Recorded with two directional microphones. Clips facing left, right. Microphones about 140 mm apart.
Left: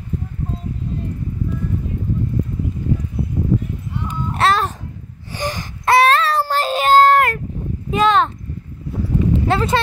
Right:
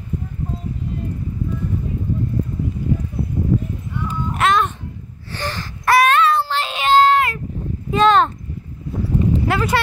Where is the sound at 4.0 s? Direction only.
35° left (ahead or behind).